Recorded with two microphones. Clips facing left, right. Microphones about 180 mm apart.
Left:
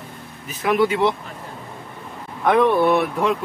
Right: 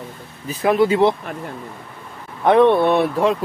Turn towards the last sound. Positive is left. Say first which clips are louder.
# right 2 dB
turn(degrees=-30)  # may be behind; listen again after turning